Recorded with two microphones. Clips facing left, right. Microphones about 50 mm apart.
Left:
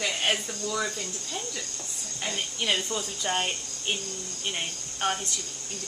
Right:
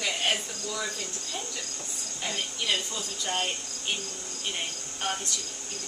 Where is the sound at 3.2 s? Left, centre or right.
Centre.